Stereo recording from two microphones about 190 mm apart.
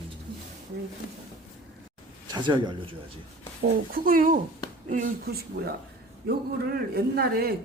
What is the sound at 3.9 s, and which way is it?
Speech, 50° right (ahead or behind).